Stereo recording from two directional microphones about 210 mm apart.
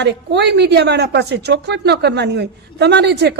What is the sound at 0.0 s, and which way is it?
A woman's voice, 55° right (ahead or behind).